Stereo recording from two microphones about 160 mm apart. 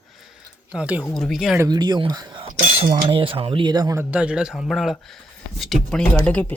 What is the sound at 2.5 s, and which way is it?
Speech, 55° right (ahead or behind).